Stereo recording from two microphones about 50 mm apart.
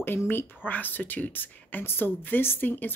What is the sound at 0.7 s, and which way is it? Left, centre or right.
Speech, left.